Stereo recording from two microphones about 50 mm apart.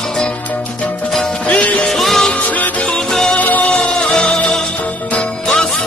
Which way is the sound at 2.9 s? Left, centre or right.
Centre.